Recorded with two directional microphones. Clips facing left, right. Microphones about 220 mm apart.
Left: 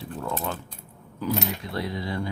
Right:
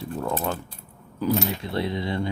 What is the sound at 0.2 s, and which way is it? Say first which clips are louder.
Keys jangling: right 3 dB; 45° right (ahead or behind).